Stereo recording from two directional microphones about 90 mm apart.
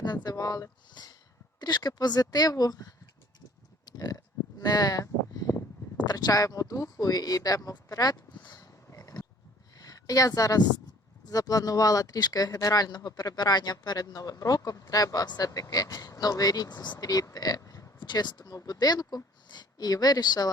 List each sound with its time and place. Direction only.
0.0 s speech: 50° left (ahead or behind)
4.6 s a sound: 45° left (ahead or behind)
6.1 s speech: 45° left (ahead or behind)
8.6 s a sound: 40° left (ahead or behind)
9.7 s a woman's voice: 45° left (ahead or behind)
18.0 s speech: 55° left (ahead or behind)